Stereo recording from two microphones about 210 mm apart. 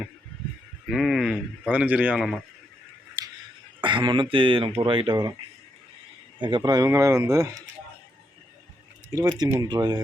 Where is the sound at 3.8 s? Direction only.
20° right (ahead or behind).